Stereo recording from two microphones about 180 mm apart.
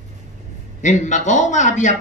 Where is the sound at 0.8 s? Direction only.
45° left (ahead or behind).